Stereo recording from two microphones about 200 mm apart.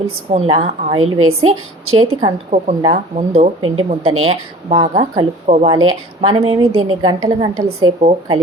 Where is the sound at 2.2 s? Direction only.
35° right (ahead or behind).